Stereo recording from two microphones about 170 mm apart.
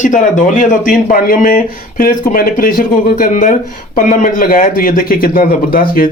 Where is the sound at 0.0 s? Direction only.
50° left (ahead or behind).